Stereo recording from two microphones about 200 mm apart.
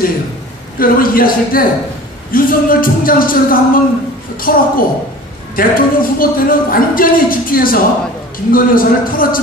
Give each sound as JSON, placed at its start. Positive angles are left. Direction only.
{"t": 0.7, "sound": "speech", "side_deg": 45}